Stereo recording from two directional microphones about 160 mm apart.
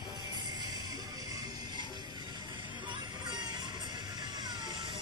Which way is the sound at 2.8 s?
25° right (ahead or behind).